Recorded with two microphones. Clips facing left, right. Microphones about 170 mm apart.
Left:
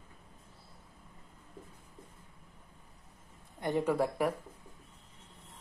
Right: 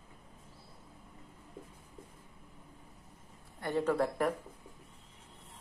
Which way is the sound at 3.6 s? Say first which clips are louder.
Left 1 dB; 15° left (ahead or behind).